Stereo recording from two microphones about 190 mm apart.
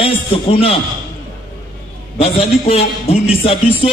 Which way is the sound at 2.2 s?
30° left (ahead or behind).